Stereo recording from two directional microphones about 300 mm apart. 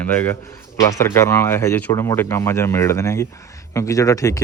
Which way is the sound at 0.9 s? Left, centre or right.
Centre.